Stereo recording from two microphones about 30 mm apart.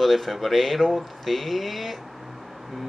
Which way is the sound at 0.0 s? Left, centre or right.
Centre.